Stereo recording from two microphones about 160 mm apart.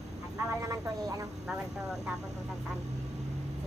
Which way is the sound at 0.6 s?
20° right (ahead or behind).